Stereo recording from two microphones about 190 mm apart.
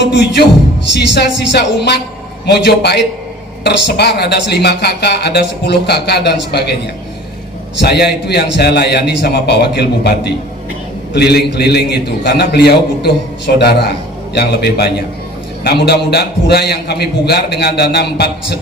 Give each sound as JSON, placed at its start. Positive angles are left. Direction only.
{"t": 0.1, "sound": "speech", "side_deg": 65}
{"t": 7.8, "sound": "speech", "side_deg": 60}